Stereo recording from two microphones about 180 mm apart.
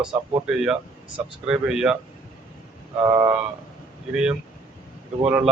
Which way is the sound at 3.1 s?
20° right (ahead or behind).